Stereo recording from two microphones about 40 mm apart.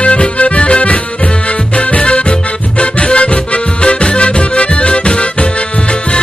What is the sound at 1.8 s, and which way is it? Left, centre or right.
Music, left.